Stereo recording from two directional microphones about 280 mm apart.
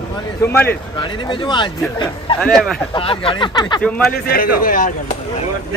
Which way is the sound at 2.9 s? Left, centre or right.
Centre.